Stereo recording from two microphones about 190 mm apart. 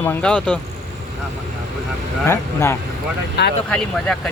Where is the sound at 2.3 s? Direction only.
15° left (ahead or behind).